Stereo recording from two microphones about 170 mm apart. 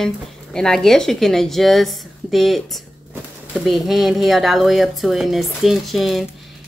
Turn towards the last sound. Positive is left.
turn(degrees=0)  # may be behind; listen again after turning